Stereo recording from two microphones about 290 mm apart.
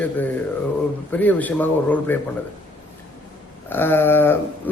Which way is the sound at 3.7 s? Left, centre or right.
Centre.